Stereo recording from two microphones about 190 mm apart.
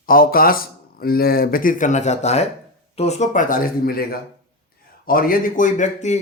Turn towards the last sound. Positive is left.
turn(degrees=40)  # may be behind; listen again after turning